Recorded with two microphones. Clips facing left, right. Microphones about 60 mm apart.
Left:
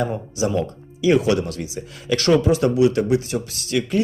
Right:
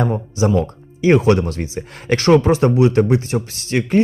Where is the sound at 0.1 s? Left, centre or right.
Right.